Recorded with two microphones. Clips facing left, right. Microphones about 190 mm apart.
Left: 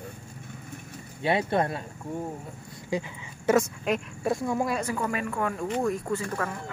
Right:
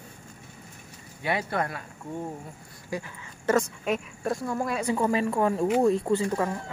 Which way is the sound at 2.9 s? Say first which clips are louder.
Left 4 dB; 20° left (ahead or behind).